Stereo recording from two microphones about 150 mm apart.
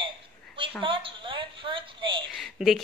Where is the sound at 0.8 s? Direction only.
35° right (ahead or behind).